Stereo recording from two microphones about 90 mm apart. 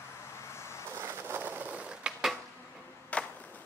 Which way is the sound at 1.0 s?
20° right (ahead or behind).